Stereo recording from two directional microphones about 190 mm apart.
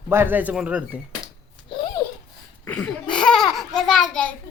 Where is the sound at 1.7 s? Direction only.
25° left (ahead or behind).